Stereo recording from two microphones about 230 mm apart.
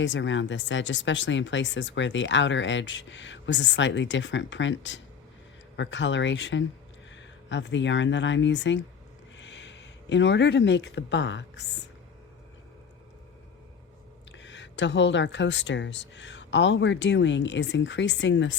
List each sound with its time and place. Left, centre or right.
0.0 s speech: left
14.3 s speech: left